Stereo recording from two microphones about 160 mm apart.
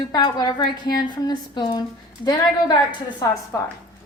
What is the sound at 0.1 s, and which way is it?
A woman's voice, 25° left (ahead or behind).